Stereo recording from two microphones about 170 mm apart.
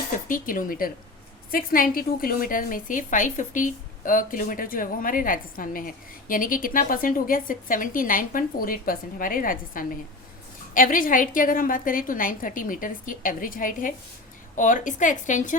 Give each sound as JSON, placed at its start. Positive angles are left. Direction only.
{"t": 0.3, "sound": "a woman's voice", "side_deg": 50}